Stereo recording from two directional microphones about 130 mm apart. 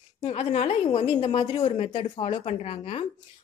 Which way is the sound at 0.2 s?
50° left (ahead or behind).